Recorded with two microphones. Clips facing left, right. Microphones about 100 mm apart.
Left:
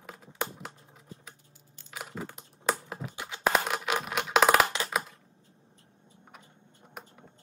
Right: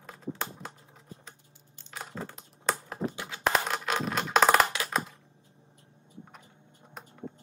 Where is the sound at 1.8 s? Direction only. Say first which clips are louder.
Even; 10° left (ahead or behind).